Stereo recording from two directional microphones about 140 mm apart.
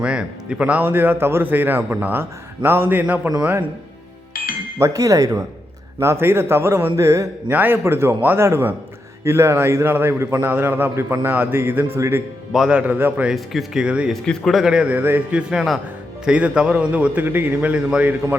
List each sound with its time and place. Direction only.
0.0 s speech: 5° right (ahead or behind)
4.8 s speech: 25° right (ahead or behind)
12.5 s speech: 5° right (ahead or behind)
13.3 s a man's voice: centre (ahead or behind)